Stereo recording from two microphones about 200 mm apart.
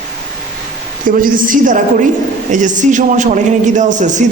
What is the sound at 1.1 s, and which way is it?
A man's voice, 45° right (ahead or behind).